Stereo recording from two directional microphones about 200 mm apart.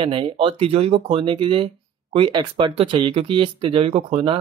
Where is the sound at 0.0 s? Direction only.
25° right (ahead or behind).